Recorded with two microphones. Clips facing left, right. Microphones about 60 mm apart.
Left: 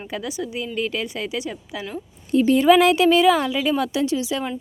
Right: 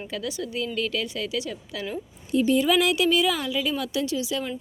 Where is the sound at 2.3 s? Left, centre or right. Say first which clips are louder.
Left 6 dB; left.